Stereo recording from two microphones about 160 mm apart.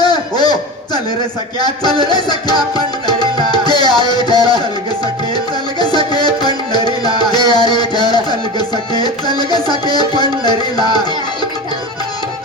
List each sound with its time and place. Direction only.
0.0 s a sound: 25° left (ahead or behind)
1.5 s music: 25° left (ahead or behind)
5.8 s music: 25° left (ahead or behind)